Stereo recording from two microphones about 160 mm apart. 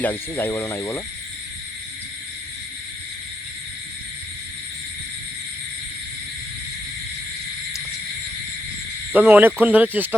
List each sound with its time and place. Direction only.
0.0 s speech: 10° left (ahead or behind)
9.1 s speech: 10° right (ahead or behind)